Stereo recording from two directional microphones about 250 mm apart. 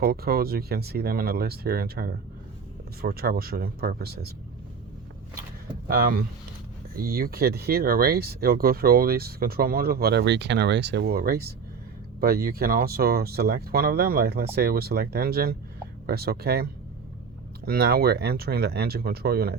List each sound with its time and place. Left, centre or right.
0.0 s speech: right
5.9 s speech: right
17.7 s speech: right